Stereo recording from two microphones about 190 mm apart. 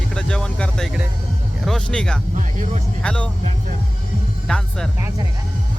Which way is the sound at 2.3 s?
40° right (ahead or behind).